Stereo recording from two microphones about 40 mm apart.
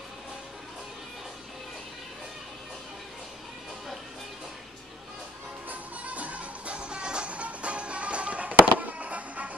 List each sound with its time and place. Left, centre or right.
5.7 s music: right